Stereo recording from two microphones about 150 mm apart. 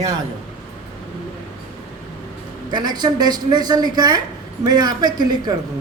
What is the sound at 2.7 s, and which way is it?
A woman's voice, 30° right (ahead or behind).